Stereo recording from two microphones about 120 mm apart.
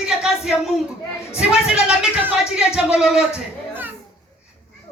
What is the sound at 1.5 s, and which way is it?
Speech, 10° right (ahead or behind).